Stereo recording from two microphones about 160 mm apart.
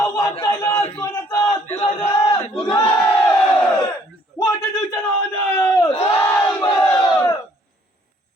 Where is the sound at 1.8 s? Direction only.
20° left (ahead or behind).